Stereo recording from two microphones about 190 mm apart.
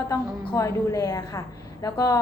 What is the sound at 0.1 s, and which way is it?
A woman's voice, 15° left (ahead or behind).